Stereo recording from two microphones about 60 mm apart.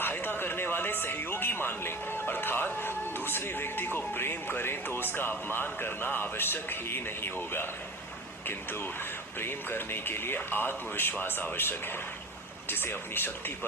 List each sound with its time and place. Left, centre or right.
0.0 s music: left
2.7 s speech: left